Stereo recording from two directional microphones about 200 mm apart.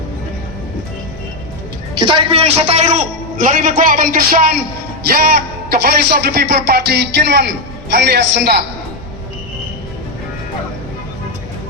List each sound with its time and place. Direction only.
2.0 s a man's voice: 25° right (ahead or behind); by 4.6 s 45° right (ahead or behind)
5.6 s a man's voice: 50° right (ahead or behind)